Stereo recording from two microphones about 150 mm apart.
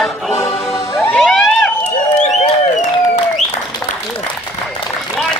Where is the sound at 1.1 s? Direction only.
Centre (ahead or behind).